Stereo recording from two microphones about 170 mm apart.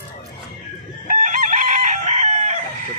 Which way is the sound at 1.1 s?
50° right (ahead or behind).